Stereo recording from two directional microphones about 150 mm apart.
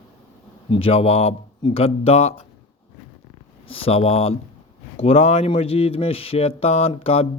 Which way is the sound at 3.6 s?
40° left (ahead or behind).